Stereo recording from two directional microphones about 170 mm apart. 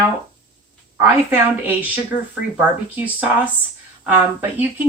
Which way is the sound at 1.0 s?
10° right (ahead or behind).